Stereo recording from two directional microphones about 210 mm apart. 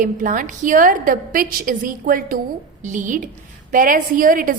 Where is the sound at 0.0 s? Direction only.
40° right (ahead or behind).